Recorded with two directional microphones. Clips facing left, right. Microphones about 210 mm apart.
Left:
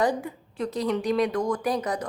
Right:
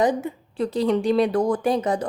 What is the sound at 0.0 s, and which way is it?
A woman's voice, 20° right (ahead or behind).